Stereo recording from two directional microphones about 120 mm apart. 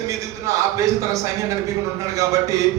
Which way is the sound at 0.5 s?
25° right (ahead or behind).